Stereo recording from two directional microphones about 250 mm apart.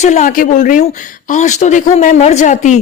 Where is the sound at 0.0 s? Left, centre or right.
Left.